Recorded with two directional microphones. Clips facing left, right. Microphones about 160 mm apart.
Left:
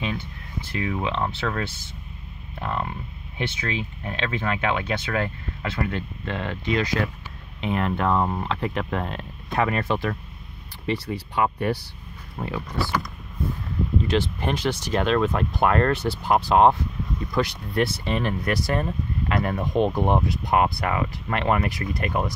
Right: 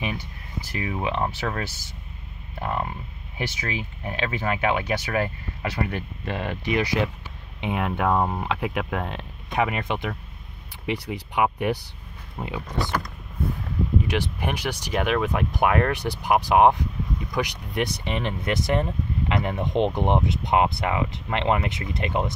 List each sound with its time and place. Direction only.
0.7 s speech: 10° right (ahead or behind)
2.6 s speech: 10° right (ahead or behind)
14.0 s speech: 15° right (ahead or behind)